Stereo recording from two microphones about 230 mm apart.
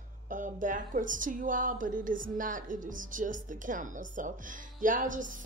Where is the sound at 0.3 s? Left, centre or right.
Right.